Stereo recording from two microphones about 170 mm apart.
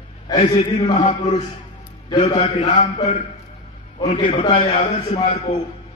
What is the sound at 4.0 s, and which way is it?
Speech, 30° left (ahead or behind).